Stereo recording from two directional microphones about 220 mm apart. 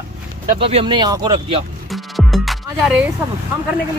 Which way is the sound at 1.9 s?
Centre (ahead or behind).